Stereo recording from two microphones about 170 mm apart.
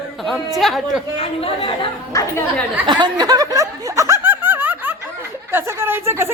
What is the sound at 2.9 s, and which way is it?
Speech, 25° right (ahead or behind).